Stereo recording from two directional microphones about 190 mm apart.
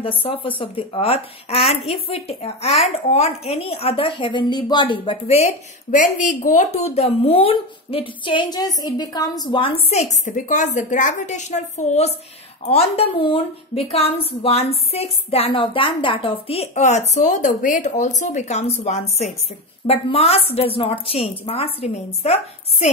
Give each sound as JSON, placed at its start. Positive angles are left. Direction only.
{"t": 0.2, "sound": "a woman's voice", "side_deg": 30}
{"t": 5.9, "sound": "a woman's voice", "side_deg": 45}